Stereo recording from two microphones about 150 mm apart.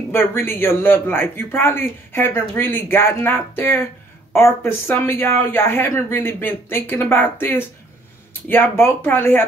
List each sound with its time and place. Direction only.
0.1 s speech: 15° left (ahead or behind)